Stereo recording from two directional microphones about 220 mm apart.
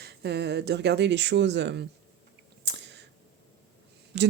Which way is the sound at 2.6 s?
50° right (ahead or behind).